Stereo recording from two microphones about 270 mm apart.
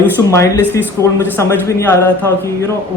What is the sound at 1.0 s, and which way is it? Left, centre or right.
Speech, centre.